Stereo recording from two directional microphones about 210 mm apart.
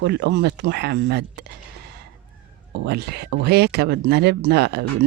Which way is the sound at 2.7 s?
55° right (ahead or behind).